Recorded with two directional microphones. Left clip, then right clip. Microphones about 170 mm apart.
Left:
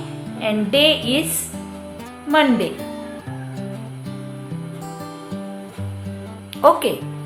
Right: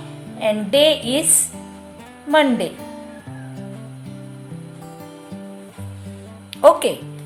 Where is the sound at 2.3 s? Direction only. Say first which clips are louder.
Even; 35° right (ahead or behind).